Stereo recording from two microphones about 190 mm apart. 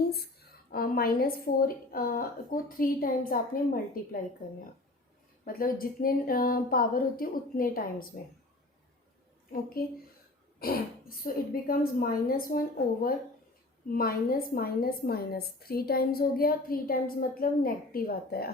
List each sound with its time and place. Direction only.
0.7 s a woman's voice: 50° left (ahead or behind)
5.5 s a woman's voice: 50° left (ahead or behind)
9.5 s a woman's voice: 50° left (ahead or behind)
11.7 s a woman's voice: 50° left (ahead or behind)